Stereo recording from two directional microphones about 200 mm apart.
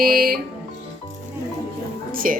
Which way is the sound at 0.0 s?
50° right (ahead or behind).